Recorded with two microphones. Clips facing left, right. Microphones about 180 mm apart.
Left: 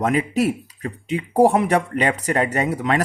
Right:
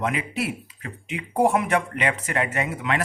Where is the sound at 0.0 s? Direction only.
40° left (ahead or behind).